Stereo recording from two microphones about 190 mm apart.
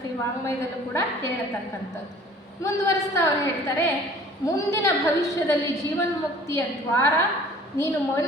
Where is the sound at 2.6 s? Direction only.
15° left (ahead or behind).